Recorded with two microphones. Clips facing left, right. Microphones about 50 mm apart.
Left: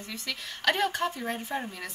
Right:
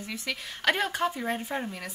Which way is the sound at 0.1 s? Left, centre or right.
Centre.